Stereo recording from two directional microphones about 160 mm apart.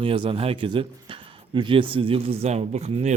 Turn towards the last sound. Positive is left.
turn(degrees=-45)  # may be behind; listen again after turning